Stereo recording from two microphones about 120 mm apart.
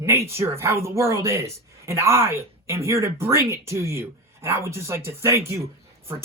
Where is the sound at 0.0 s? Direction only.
20° right (ahead or behind).